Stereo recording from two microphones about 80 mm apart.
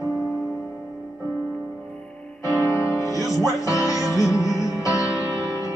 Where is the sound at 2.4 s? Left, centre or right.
Left.